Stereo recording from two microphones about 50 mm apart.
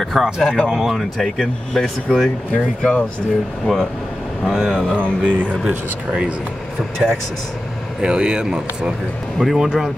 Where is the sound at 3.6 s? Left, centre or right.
Centre.